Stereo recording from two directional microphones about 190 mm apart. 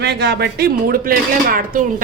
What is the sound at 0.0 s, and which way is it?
Speech, 65° right (ahead or behind).